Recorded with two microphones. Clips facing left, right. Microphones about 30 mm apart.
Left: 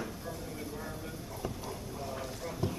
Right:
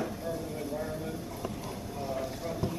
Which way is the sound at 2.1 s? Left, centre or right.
Centre.